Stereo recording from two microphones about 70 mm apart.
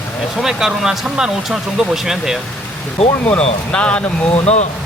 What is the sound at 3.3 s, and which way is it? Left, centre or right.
Speech, centre.